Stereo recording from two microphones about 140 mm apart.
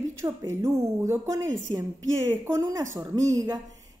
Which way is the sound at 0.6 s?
20° right (ahead or behind).